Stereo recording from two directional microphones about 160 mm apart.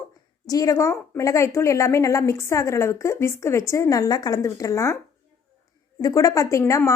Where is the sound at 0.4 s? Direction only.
20° left (ahead or behind).